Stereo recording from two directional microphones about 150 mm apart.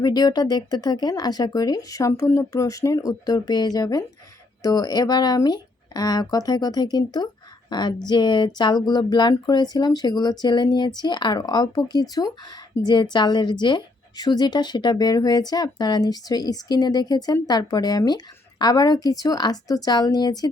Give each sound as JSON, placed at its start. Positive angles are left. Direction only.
{"t": 0.0, "sound": "a woman's voice", "side_deg": 25}